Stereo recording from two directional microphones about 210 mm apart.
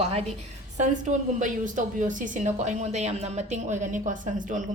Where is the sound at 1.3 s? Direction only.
40° right (ahead or behind).